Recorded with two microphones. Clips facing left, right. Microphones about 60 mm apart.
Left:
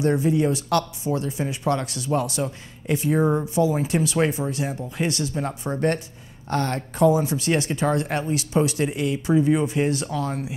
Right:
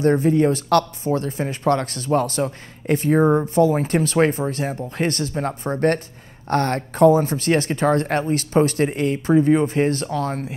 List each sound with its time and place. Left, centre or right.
0.0 s speech: right
3.2 s speech: right
3.4 s speech: right